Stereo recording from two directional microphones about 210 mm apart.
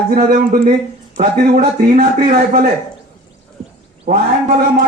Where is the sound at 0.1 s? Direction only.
40° right (ahead or behind).